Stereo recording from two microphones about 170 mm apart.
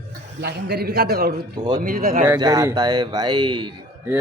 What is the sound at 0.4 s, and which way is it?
A man's voice, 70° right (ahead or behind).